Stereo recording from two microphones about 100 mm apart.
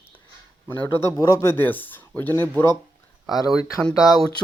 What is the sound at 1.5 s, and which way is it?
Speech, 20° left (ahead or behind).